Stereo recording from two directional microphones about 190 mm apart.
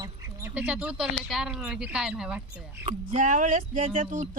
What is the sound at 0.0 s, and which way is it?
Speech, 10° right (ahead or behind).